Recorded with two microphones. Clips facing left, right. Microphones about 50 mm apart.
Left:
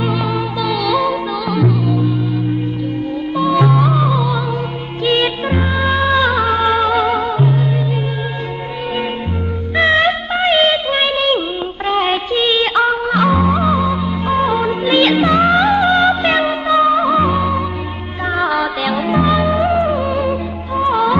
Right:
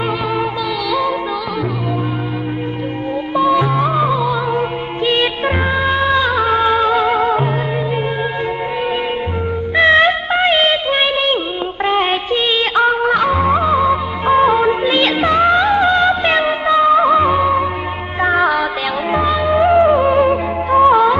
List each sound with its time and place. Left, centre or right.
0.8 s music: centre
3.3 s music: centre
9.8 s music of bollywood: centre
11.8 s music: centre
20.0 s music: right
20.9 s music: centre